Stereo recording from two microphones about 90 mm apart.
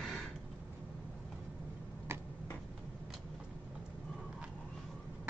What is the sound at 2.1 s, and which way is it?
Finger snapping, 25° right (ahead or behind).